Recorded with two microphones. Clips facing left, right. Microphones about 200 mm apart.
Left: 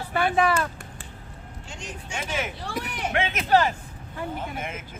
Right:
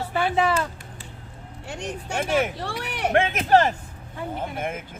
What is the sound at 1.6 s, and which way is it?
Speech, 65° right (ahead or behind).